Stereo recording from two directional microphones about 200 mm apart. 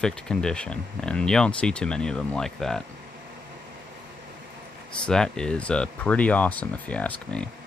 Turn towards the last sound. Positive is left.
turn(degrees=5)  # may be behind; listen again after turning